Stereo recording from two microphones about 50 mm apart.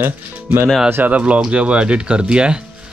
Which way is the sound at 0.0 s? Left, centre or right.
Right.